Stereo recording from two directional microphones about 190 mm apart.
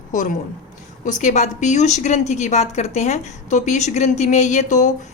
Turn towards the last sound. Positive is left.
turn(degrees=40)  # may be behind; listen again after turning